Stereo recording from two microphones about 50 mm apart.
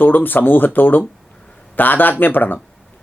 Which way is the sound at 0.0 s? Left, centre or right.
Left.